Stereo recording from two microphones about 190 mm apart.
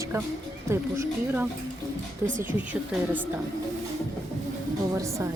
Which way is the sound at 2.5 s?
10° right (ahead or behind).